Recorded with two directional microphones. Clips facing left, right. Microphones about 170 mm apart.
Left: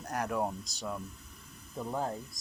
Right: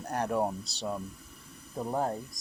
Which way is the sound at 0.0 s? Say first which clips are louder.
Right 3 dB; 30° right (ahead or behind).